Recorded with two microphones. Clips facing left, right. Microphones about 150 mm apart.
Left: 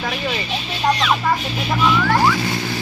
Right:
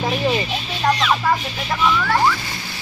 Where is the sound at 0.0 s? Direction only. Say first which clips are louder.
Right 4 dB; 25° right (ahead or behind).